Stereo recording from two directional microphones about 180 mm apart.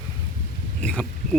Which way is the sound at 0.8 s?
5° left (ahead or behind).